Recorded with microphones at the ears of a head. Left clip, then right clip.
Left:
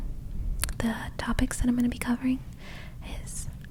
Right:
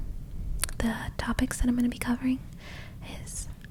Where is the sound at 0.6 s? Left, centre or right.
Centre.